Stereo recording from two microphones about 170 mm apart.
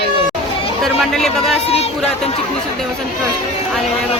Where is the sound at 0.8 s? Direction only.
Centre (ahead or behind).